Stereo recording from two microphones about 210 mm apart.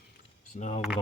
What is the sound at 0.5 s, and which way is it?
Speech, 35° left (ahead or behind).